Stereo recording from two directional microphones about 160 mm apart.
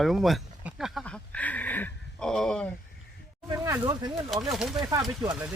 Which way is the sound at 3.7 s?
25° right (ahead or behind).